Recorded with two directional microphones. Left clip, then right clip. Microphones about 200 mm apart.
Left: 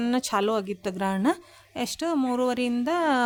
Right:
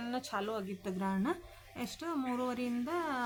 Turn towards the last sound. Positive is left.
turn(degrees=50)  # may be behind; listen again after turning